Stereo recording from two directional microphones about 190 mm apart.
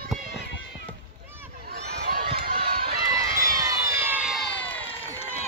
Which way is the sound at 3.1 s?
15° right (ahead or behind).